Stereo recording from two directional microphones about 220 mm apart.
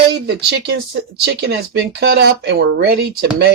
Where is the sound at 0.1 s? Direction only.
50° right (ahead or behind).